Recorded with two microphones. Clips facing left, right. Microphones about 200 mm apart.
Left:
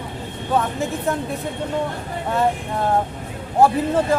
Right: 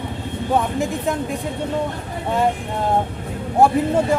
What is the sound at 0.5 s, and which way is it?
Speech, 15° right (ahead or behind).